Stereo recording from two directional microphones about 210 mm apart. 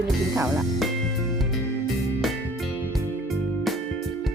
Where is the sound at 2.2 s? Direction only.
Centre (ahead or behind).